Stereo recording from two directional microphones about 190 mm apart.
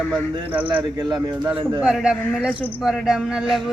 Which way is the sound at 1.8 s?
5° right (ahead or behind).